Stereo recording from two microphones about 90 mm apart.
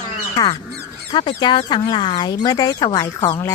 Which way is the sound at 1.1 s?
55° left (ahead or behind).